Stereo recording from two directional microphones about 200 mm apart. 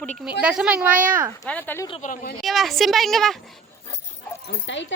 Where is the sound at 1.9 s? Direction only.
40° left (ahead or behind).